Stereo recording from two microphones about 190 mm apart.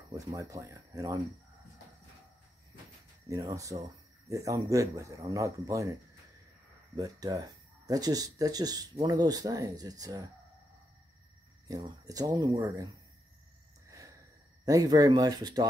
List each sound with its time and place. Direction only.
0.1 s speech: 20° right (ahead or behind)
3.3 s speech: 15° right (ahead or behind)
7.0 s speech: 20° right (ahead or behind)
11.6 s speech: 20° right (ahead or behind)
13.8 s a sound: 15° right (ahead or behind)
14.6 s speech: 20° right (ahead or behind)